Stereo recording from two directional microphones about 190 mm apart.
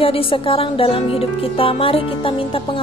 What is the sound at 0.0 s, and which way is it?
Speech, 30° left (ahead or behind).